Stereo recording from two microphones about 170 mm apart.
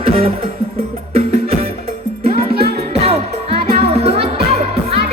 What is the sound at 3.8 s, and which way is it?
Music, 35° right (ahead or behind).